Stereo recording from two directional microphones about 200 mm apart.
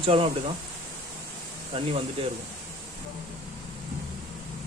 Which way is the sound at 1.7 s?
30° right (ahead or behind).